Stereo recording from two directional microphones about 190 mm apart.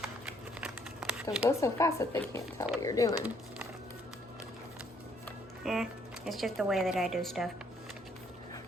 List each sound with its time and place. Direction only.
0.6 s a sound: 5° right (ahead or behind)
1.5 s speech: 15° left (ahead or behind)
5.6 s speech: centre (ahead or behind)